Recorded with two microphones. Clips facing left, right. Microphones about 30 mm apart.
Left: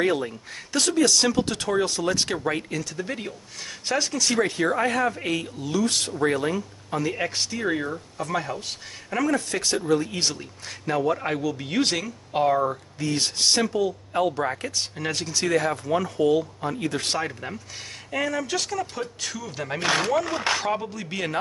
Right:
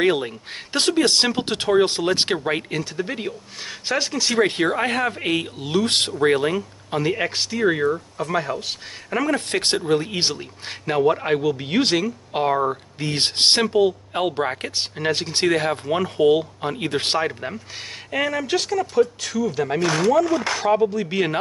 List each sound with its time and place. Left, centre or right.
0.0 s speech: right
9.5 s speech: right
9.8 s speech: right
13.0 s speech: right
17.3 s speech: centre
19.8 s speech: left
20.6 s speech: centre